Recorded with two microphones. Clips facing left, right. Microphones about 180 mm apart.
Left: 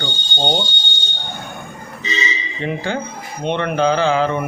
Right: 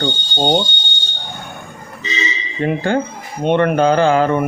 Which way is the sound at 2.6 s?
50° right (ahead or behind).